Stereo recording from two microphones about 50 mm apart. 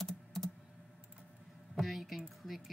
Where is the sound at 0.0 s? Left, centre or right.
Centre.